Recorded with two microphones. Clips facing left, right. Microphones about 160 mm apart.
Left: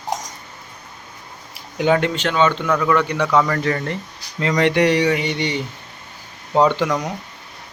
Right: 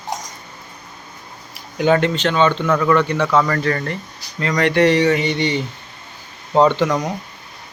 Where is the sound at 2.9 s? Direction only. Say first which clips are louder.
Right 1 dB; 10° left (ahead or behind).